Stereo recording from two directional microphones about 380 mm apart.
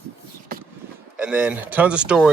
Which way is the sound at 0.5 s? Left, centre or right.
Right.